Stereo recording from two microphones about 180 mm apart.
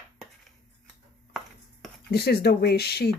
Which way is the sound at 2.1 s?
60° left (ahead or behind).